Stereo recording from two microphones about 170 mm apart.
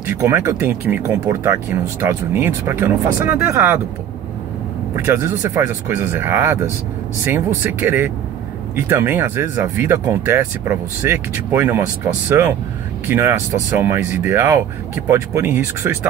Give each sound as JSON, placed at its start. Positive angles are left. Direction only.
{"t": 0.0, "sound": "speech", "side_deg": -15}
{"t": 4.9, "sound": "speech", "side_deg": -15}